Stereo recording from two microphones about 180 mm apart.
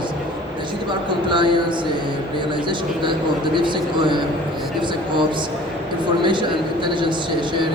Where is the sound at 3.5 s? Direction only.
25° right (ahead or behind).